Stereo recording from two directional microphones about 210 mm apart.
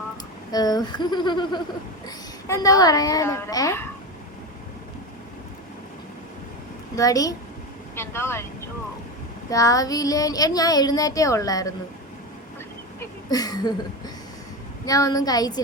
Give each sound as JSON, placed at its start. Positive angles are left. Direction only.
{"t": 0.5, "sound": "speech", "side_deg": 20}
{"t": 6.9, "sound": "speech", "side_deg": 15}
{"t": 9.5, "sound": "speech", "side_deg": 15}
{"t": 13.0, "sound": "speech", "side_deg": 20}